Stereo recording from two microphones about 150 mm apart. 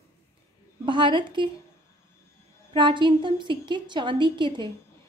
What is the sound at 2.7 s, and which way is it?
A woman's voice, 30° right (ahead or behind).